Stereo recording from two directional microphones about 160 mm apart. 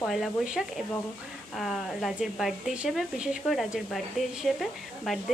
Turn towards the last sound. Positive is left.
turn(degrees=0)  # may be behind; listen again after turning